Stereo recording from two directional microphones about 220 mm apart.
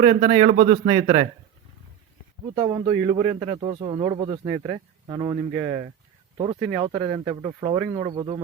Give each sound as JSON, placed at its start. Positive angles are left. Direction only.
{"t": 0.0, "sound": "a man's voice", "side_deg": -30}
{"t": 0.9, "sound": "speech", "side_deg": -25}
{"t": 2.6, "sound": "speech", "side_deg": -15}